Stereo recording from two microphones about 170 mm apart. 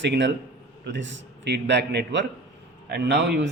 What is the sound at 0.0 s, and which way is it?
A man's voice, 90° right.